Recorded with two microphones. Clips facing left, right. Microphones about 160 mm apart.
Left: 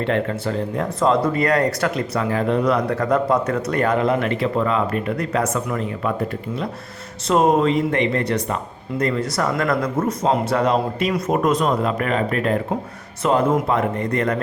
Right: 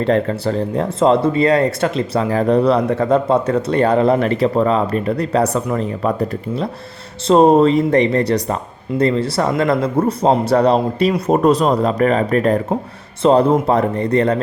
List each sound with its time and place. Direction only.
0.0 s speech: 35° right (ahead or behind)
2.3 s speech: 35° right (ahead or behind)